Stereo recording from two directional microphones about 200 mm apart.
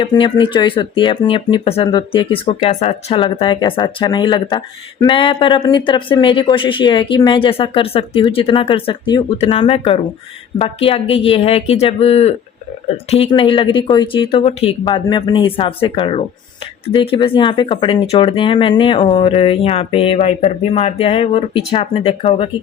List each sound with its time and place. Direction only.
0.0 s speech: 25° left (ahead or behind)
13.3 s speech: 25° left (ahead or behind)